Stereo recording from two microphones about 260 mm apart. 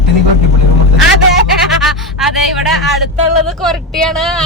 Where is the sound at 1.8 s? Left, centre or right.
Centre.